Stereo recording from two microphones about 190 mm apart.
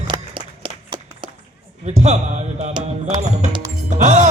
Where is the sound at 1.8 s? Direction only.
35° right (ahead or behind).